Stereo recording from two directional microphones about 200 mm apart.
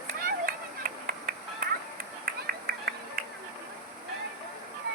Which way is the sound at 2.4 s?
50° right (ahead or behind).